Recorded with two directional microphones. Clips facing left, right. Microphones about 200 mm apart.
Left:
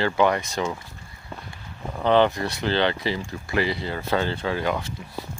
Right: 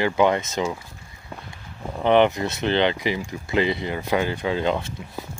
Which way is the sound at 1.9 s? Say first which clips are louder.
Right 2 dB; 20° right (ahead or behind).